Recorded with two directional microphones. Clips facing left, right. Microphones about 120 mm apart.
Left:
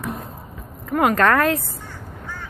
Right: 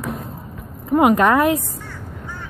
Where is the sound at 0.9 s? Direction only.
15° right (ahead or behind).